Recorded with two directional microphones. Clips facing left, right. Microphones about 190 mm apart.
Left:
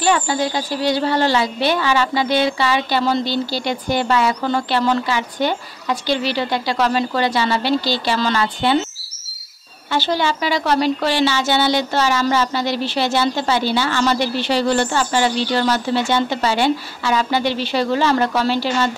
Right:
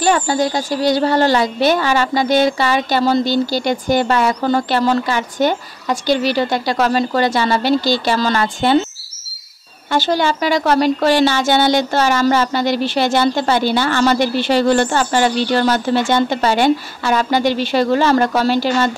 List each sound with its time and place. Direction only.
0.0 s a woman's voice: 45° right (ahead or behind)
9.8 s a woman's voice: 45° right (ahead or behind)